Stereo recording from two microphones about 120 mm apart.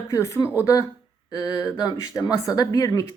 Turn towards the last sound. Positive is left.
turn(degrees=30)  # may be behind; listen again after turning